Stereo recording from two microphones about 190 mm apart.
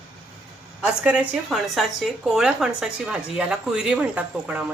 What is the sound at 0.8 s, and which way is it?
A woman's voice, 5° right (ahead or behind).